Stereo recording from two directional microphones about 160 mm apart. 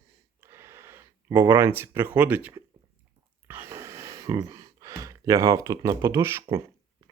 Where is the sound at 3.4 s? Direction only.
15° right (ahead or behind).